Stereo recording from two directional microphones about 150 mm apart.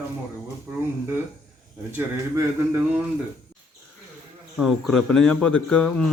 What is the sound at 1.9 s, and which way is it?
Speech, 15° right (ahead or behind).